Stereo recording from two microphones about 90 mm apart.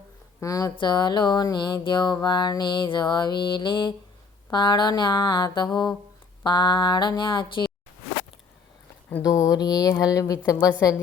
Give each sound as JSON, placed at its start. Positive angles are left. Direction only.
{"t": 0.3, "sound": "speech", "side_deg": 35}
{"t": 0.8, "sound": "mantra", "side_deg": 55}
{"t": 9.2, "sound": "a woman's voice", "side_deg": 40}